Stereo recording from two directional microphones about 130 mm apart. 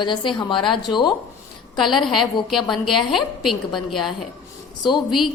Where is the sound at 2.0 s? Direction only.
Centre (ahead or behind).